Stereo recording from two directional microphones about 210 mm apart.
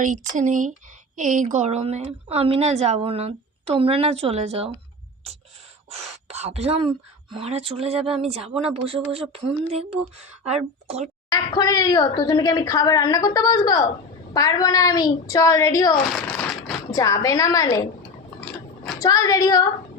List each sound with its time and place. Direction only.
0.0 s a woman's voice: 35° right (ahead or behind)
5.9 s a woman's voice: 30° right (ahead or behind)
11.3 s a woman's voice: 20° left (ahead or behind)
16.1 s crumpling: 5° left (ahead or behind)
16.9 s a woman's voice: 15° left (ahead or behind)
18.9 s a woman's voice: 15° left (ahead or behind)